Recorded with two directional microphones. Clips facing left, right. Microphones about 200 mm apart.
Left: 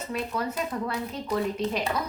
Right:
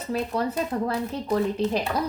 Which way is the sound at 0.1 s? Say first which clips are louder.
Right 5 dB; 30° right (ahead or behind).